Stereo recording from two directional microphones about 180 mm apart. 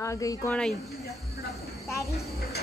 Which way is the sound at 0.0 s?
15° left (ahead or behind).